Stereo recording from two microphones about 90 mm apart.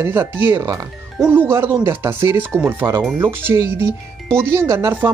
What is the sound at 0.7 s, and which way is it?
Speech, 35° right (ahead or behind).